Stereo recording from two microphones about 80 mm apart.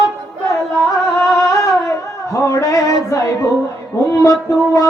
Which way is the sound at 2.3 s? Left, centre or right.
Left.